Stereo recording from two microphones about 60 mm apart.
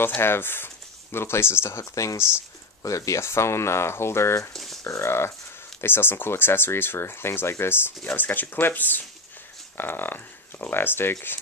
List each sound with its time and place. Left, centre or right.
0.2 s speech: left
3.2 s speech: left
4.5 s speech: centre
4.8 s speech: left